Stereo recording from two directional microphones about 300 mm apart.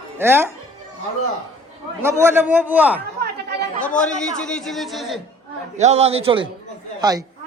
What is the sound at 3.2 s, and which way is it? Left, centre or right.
Chatter, right.